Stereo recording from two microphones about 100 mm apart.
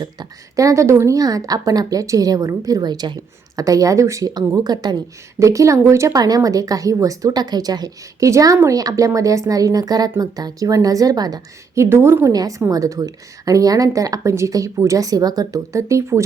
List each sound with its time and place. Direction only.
0.0 s a woman's voice: 40° right (ahead or behind)
5.4 s a woman's voice: 30° right (ahead or behind)